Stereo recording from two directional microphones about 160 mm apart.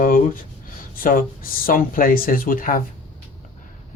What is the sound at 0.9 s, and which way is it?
Speech, 65° left (ahead or behind).